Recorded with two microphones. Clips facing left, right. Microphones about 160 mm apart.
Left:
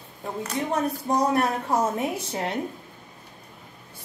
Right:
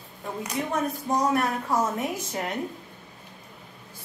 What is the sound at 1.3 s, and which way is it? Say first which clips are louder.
A woman's voice: left 2 dB; 30° left (ahead or behind).